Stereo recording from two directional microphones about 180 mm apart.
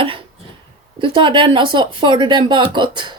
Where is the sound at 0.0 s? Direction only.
30° right (ahead or behind).